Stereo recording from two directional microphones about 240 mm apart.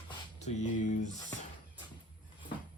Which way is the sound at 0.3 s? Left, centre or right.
Left.